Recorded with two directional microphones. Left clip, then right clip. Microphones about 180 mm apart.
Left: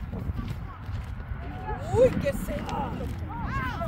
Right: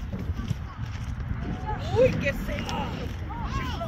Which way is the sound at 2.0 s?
30° left (ahead or behind).